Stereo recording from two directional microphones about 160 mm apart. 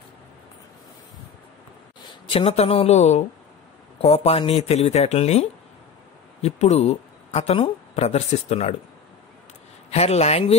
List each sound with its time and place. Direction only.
2.2 s speech: 35° left (ahead or behind)
9.8 s speech: 40° left (ahead or behind)